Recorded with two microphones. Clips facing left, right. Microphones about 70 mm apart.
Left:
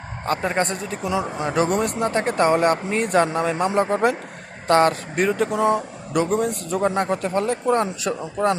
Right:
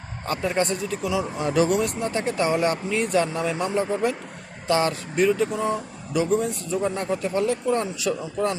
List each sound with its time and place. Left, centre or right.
0.3 s speech: left
1.6 s speech: left
8.4 s speech: left